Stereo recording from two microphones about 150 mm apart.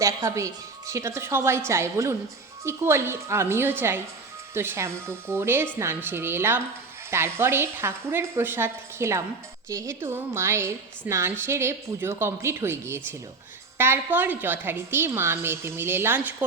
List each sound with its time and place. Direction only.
0.0 s a woman's voice: 20° right (ahead or behind)